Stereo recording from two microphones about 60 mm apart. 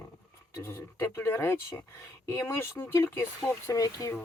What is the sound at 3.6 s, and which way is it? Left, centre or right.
Speech, left.